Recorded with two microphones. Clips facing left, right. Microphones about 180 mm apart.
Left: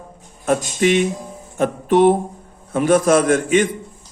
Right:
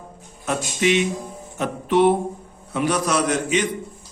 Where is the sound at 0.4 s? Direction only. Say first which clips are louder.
Left 4 dB; 45° left (ahead or behind).